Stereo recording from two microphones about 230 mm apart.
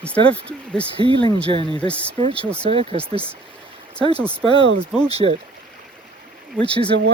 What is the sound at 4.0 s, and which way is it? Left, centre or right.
Speech, right.